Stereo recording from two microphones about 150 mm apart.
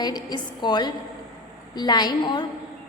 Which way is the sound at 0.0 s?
25° left (ahead or behind).